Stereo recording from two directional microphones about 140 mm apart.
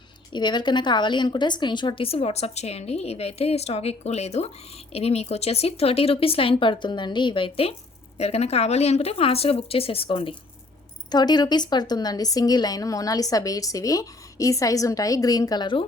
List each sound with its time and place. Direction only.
0.3 s a woman's voice: 30° left (ahead or behind)